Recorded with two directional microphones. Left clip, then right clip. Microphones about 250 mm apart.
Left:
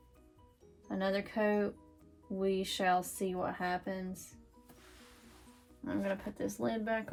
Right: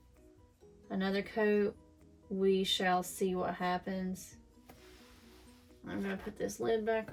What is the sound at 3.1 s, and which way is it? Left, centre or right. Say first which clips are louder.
Speech: right 2 dB; centre.